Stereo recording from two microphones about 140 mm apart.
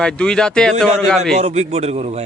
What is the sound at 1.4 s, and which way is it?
Speech, 50° right (ahead or behind).